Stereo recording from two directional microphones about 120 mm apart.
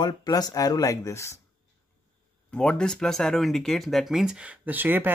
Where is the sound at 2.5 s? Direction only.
5° left (ahead or behind); by 5.1 s 15° right (ahead or behind).